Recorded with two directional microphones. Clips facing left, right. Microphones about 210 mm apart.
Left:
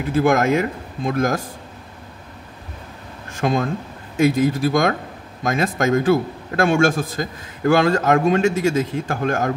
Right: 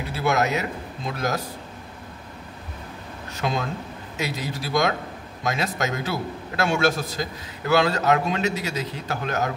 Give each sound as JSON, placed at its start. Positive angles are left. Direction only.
{"t": 0.0, "sound": "a man's voice", "side_deg": 50}
{"t": 3.3, "sound": "a man's voice", "side_deg": 50}